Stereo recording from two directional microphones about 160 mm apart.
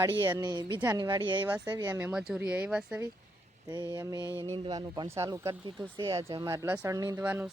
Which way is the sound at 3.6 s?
20° right (ahead or behind).